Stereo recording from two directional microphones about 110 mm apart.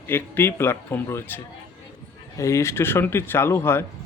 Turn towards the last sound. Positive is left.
turn(degrees=25)  # may be behind; listen again after turning